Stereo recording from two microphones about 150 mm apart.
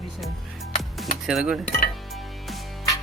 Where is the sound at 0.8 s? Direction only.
Centre (ahead or behind).